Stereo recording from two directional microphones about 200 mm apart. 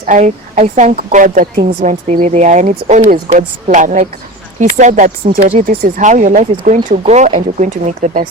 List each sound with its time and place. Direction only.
0.0 s speech: 40° right (ahead or behind)